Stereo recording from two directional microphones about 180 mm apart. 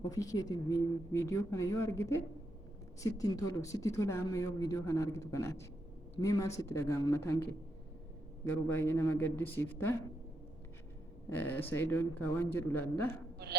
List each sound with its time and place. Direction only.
0.0 s speech: 20° left (ahead or behind)
8.6 s speech: 10° left (ahead or behind)
11.3 s speech: 10° left (ahead or behind)